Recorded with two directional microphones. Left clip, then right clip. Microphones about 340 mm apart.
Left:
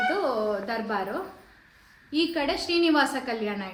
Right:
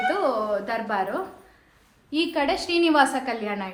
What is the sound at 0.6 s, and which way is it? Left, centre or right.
A woman's voice, centre.